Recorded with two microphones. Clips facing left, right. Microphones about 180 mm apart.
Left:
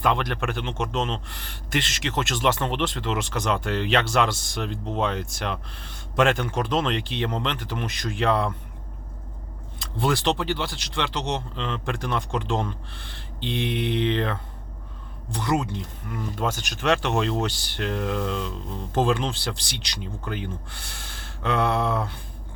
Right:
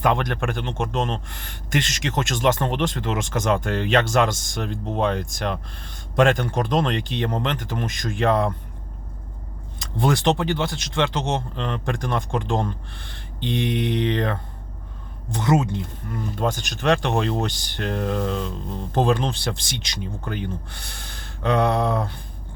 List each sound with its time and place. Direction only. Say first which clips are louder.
0.0 s speech: right 2 dB; 45° right (ahead or behind)
9.7 s speech: right 3 dB; 50° right (ahead or behind)
16.1 s speech: right 3 dB; 35° right (ahead or behind)